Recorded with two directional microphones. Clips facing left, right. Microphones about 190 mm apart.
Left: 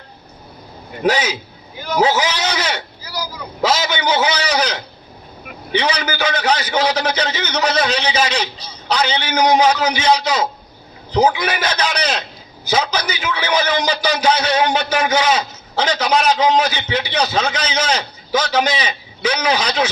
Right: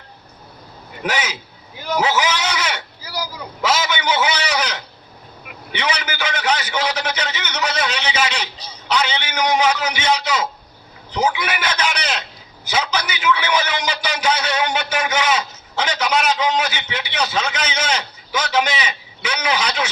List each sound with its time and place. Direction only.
1.0 s a man's voice: 35° left (ahead or behind)